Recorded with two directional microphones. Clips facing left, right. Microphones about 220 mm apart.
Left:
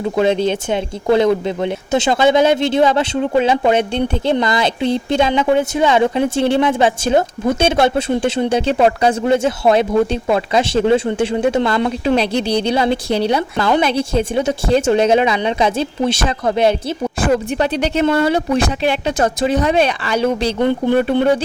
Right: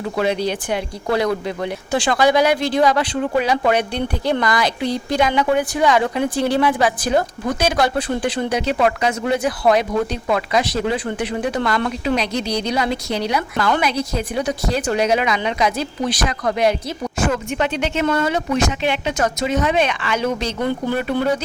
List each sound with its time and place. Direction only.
0.2 s speech: 25° left (ahead or behind)